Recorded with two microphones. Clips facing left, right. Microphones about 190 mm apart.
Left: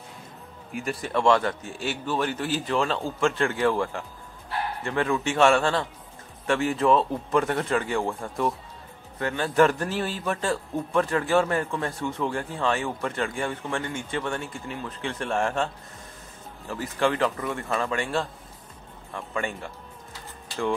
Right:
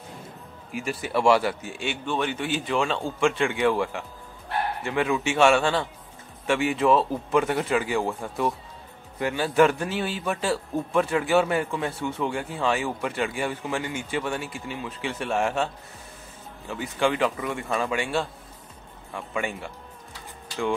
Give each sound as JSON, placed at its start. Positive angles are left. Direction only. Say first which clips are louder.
{"t": 0.7, "sound": "speech", "louder": "right 1 dB", "side_deg": -5}
{"t": 1.9, "sound": "speech", "louder": "even", "side_deg": 5}